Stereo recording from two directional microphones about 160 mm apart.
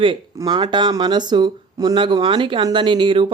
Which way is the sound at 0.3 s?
25° right (ahead or behind).